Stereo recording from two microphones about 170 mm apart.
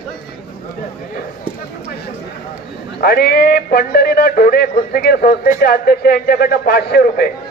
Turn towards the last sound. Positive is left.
turn(degrees=65)  # may be behind; listen again after turning